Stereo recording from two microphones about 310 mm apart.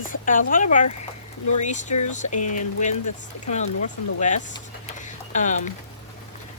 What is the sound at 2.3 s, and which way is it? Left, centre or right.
Speech, left.